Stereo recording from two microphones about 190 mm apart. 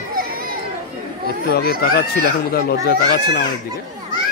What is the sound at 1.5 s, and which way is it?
Speech, 55° left (ahead or behind).